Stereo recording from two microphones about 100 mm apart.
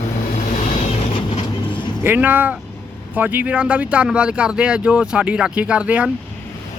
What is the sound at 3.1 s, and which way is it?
Speech, 20° right (ahead or behind).